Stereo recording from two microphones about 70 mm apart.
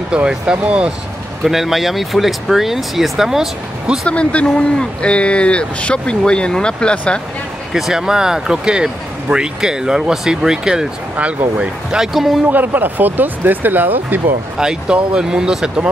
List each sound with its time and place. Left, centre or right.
0.1 s speech: centre
1.4 s speech: centre
4.1 s speech: centre
7.7 s speech: centre
11.1 s speech: centre
12.4 s speech: right
14.6 s speech: centre